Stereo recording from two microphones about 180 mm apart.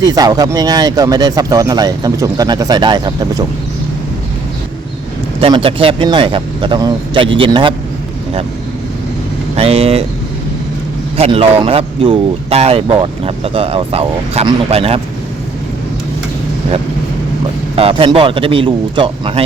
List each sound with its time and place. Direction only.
0.0 s speech: 20° right (ahead or behind)
5.4 s speech: 30° right (ahead or behind)
9.6 s speech: 35° right (ahead or behind)
11.2 s speech: 30° right (ahead or behind)
17.7 s speech: 30° right (ahead or behind)